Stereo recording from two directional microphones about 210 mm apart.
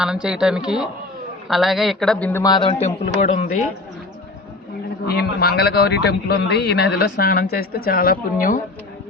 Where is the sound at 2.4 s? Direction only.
20° left (ahead or behind).